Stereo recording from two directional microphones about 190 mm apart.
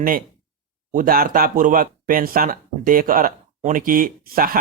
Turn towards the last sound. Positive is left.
turn(degrees=-50)  # may be behind; listen again after turning